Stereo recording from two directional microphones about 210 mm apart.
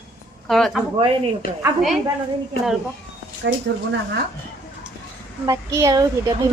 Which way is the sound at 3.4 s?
55° right (ahead or behind).